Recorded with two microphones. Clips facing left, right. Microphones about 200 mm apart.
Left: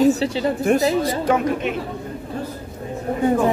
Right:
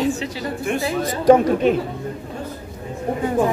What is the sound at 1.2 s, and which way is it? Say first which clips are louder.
Speech: right 6 dB; 35° right (ahead or behind).